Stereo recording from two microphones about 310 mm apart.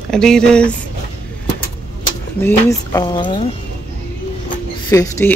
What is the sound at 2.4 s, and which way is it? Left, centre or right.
Speech, centre.